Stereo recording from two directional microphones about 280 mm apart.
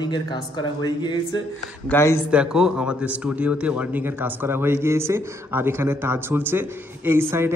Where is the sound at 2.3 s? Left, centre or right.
Centre.